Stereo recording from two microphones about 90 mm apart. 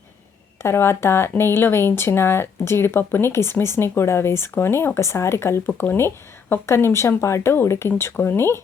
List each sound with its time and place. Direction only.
0.6 s speech: 30° left (ahead or behind)